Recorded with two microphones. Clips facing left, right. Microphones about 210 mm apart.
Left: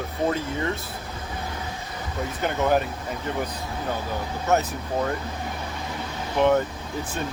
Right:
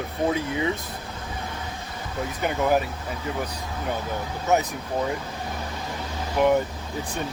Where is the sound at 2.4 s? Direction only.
10° right (ahead or behind).